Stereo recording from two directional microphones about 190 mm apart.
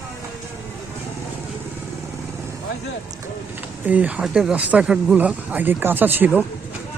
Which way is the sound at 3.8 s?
5° right (ahead or behind).